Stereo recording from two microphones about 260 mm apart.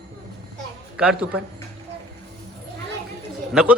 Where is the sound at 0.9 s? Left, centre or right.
Centre.